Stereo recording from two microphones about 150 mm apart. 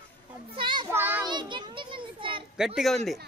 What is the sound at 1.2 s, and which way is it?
Children playing, 30° right (ahead or behind).